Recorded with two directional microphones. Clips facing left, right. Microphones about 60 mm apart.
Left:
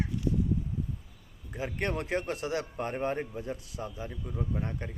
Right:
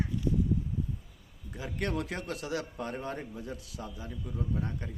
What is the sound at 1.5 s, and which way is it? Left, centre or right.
A man's voice, left.